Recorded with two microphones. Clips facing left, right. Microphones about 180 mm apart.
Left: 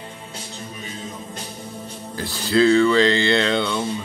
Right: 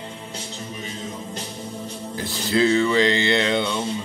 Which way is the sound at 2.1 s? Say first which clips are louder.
Left 3 dB; 20° right (ahead or behind).